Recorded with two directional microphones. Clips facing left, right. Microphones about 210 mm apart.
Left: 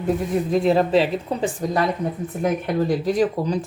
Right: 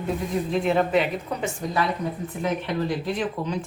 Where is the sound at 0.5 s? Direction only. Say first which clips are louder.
Left 4 dB; 35° left (ahead or behind).